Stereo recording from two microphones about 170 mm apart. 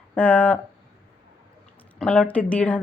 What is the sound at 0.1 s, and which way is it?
Speech, 10° left (ahead or behind).